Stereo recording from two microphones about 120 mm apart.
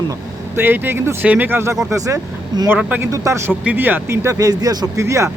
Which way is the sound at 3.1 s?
25° right (ahead or behind).